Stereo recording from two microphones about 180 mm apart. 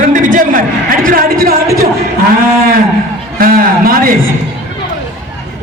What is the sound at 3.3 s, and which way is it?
Speech, 55° right (ahead or behind).